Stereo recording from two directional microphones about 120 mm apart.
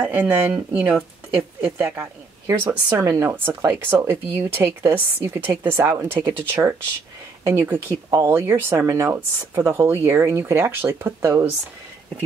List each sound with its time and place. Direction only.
0.0 s speech: 10° right (ahead or behind)
7.4 s speech: 20° right (ahead or behind)